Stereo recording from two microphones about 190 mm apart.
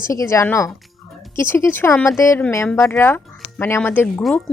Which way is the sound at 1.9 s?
Centre (ahead or behind).